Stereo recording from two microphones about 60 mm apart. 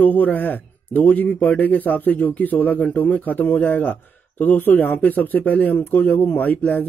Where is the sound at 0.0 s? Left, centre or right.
Left.